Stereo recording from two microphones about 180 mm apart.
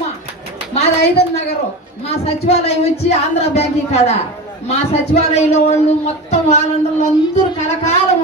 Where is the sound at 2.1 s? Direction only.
35° left (ahead or behind).